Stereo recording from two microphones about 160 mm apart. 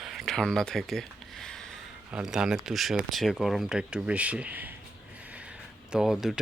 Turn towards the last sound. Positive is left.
turn(degrees=0)  # may be behind; listen again after turning